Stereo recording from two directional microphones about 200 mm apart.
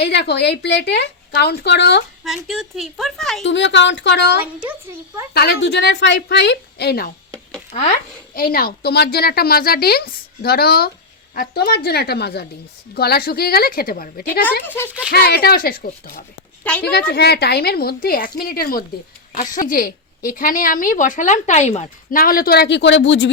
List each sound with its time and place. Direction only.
0.0 s a woman's voice: 55° left (ahead or behind)
2.2 s a woman's voice: centre (ahead or behind)
3.4 s a woman's voice: 65° left (ahead or behind)
7.7 s speech: 35° left (ahead or behind)
8.5 s a woman's voice: 50° left (ahead or behind)
14.6 s a child's voice: 10° left (ahead or behind)
15.1 s a woman's voice: 55° left (ahead or behind)
16.7 s a child's voice: 5° left (ahead or behind)
17.1 s a woman's voice: 55° left (ahead or behind)